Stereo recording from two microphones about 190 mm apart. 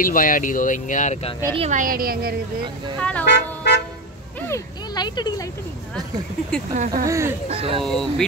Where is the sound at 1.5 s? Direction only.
40° right (ahead or behind).